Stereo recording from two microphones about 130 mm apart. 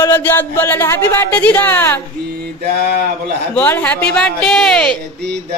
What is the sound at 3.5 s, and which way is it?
A child's voice, 15° left (ahead or behind).